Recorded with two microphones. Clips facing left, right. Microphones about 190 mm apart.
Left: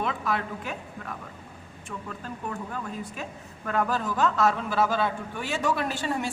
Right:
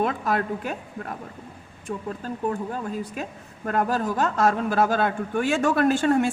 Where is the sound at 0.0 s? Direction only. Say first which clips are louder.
Right 5 dB; 45° right (ahead or behind).